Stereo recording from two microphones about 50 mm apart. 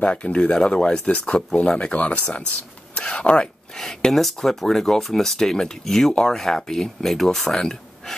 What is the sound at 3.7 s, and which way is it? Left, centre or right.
Speech, centre.